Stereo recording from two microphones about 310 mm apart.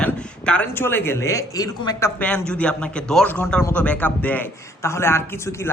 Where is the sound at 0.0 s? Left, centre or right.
Centre.